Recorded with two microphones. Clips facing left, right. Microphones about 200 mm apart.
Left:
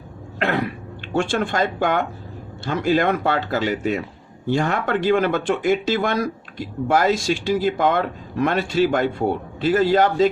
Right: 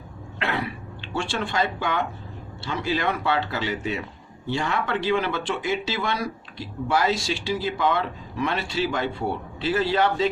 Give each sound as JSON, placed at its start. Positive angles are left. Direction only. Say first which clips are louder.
{"t": 0.3, "sound": "cough", "louder": "left 6 dB", "side_deg": 45}
{"t": 1.0, "sound": "speech", "louder": "left 7 dB", "side_deg": 50}